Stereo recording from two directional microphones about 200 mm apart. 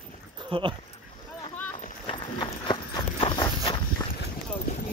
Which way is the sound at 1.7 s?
35° left (ahead or behind).